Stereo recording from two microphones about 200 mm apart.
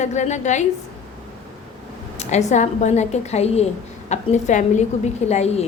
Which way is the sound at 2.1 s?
35° left (ahead or behind).